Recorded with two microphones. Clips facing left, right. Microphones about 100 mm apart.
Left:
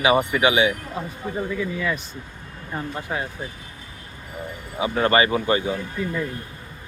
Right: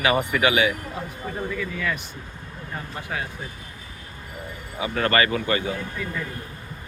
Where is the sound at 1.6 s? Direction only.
20° left (ahead or behind).